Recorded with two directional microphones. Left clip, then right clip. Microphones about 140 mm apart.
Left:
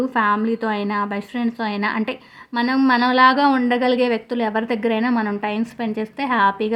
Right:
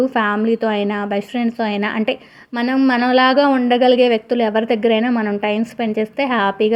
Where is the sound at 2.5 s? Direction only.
5° right (ahead or behind).